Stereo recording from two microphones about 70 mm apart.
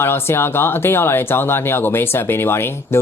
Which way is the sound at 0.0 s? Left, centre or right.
Left.